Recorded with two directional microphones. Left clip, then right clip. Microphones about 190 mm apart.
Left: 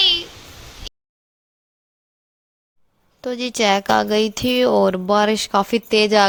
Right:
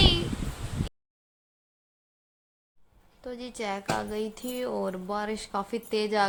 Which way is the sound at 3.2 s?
40° left (ahead or behind).